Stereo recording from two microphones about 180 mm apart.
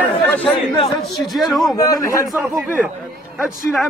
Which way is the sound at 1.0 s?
Centre (ahead or behind).